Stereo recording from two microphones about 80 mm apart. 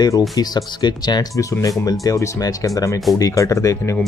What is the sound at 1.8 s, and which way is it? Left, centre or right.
Speech, left.